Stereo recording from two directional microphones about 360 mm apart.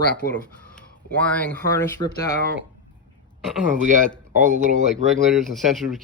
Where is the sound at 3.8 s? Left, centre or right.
Right.